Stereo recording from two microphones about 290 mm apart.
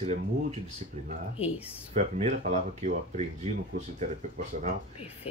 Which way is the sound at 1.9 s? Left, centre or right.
Right.